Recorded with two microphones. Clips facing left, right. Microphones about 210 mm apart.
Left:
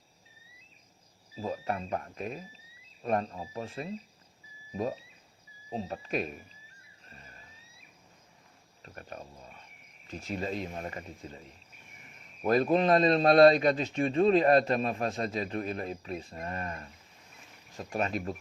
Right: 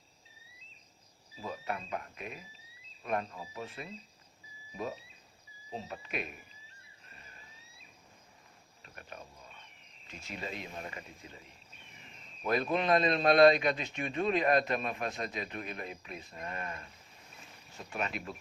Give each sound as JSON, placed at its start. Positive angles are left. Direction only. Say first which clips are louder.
{"t": 1.4, "sound": "a man's voice", "louder": "left 5 dB", "side_deg": 35}
{"t": 8.8, "sound": "cricket", "louder": "left 5 dB", "side_deg": 40}
{"t": 10.1, "sound": "a man's voice", "louder": "left 8 dB", "side_deg": 35}
{"t": 12.7, "sound": "a man's voice", "louder": "left 4 dB", "side_deg": 35}